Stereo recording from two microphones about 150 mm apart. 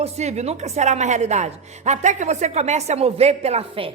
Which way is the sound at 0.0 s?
45° right (ahead or behind).